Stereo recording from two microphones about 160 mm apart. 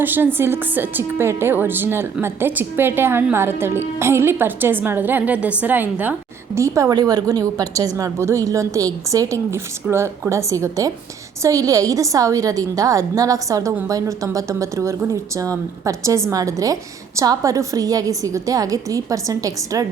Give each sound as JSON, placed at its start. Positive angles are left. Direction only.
{"t": 0.0, "sound": "a woman's voice", "side_deg": -10}